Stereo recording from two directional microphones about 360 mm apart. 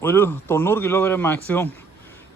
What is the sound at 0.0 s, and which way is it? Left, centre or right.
Speech, centre.